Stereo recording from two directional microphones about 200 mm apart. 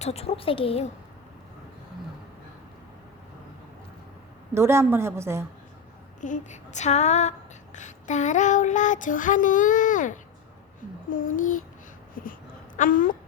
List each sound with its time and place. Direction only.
0.0 s a woman's voice: 30° left (ahead or behind)
4.5 s a woman's voice: 15° right (ahead or behind)
6.2 s female singing: 35° left (ahead or behind)
11.1 s a child's voice: 45° left (ahead or behind)
12.7 s a sound: 40° left (ahead or behind)